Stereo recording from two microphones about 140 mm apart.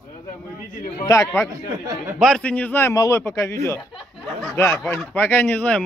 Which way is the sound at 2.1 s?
5° left (ahead or behind).